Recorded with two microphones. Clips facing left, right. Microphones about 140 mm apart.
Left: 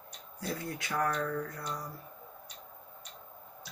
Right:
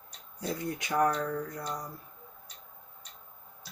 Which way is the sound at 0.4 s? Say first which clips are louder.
Right 3 dB; 20° right (ahead or behind).